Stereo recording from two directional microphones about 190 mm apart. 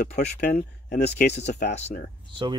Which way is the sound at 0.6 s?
60° left (ahead or behind).